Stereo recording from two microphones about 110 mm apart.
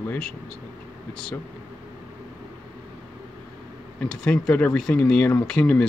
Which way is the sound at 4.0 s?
10° left (ahead or behind).